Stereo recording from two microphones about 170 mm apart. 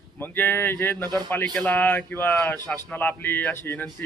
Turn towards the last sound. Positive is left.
turn(degrees=10)  # may be behind; listen again after turning